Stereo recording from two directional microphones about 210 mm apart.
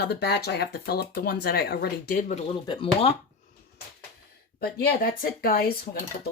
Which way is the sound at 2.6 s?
25° left (ahead or behind).